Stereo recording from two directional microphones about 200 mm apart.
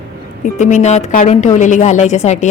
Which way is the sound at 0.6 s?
35° left (ahead or behind).